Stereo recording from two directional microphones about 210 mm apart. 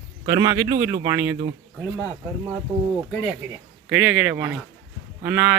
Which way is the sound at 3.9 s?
5° right (ahead or behind).